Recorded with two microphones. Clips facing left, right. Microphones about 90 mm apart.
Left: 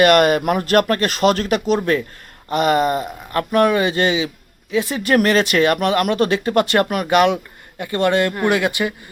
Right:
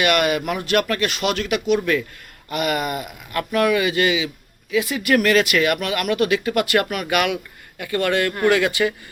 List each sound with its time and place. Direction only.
0.0 s speech: 40° left (ahead or behind); by 9.0 s 20° left (ahead or behind)